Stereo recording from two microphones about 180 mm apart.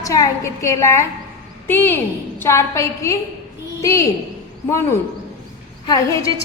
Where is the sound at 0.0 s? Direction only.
20° left (ahead or behind).